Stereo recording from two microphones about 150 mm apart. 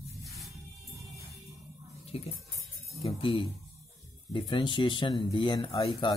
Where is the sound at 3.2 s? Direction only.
35° left (ahead or behind).